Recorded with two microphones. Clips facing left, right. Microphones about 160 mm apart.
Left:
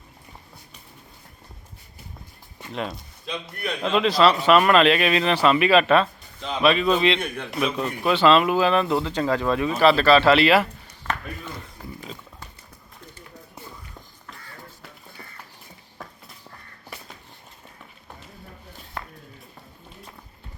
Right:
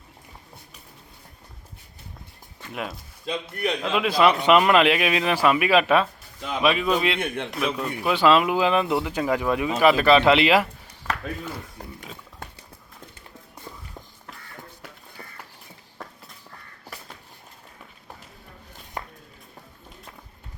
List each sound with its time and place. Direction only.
2.7 s a man's voice: 5° right (ahead or behind)
7.2 s a man's voice: 25° right (ahead or behind)
7.5 s a man's voice: centre (ahead or behind)
8.1 s speech: 10° right (ahead or behind)
11.1 s a sound: 10° right (ahead or behind)